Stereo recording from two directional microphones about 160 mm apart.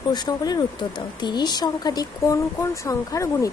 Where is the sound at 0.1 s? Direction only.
25° left (ahead or behind).